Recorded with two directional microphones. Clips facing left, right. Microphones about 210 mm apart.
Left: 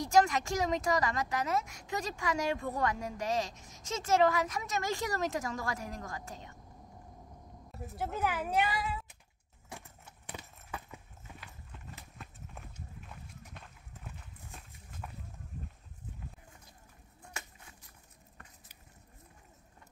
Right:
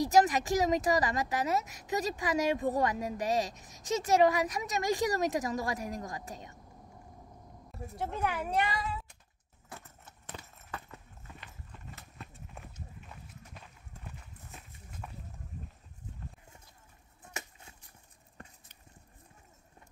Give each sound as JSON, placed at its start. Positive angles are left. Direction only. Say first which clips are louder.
{"t": 0.1, "sound": "a woman's voice", "louder": "left 1 dB", "side_deg": -20}
{"t": 7.7, "sound": "speech", "louder": "even", "side_deg": 0}
{"t": 9.7, "sound": "clip-clop", "louder": "left 1 dB", "side_deg": 15}
{"t": 17.2, "sound": "a sound", "louder": "right 3 dB", "side_deg": -25}